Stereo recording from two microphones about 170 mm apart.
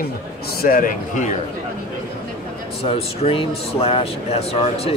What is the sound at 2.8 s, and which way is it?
Speech, 35° left (ahead or behind).